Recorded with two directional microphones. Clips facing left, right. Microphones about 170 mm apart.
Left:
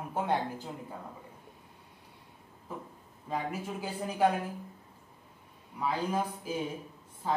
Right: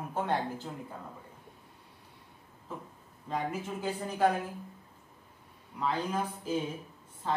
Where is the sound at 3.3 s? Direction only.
10° left (ahead or behind).